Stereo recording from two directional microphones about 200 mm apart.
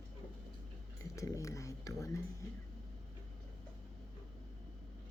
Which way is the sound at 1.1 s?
15° left (ahead or behind).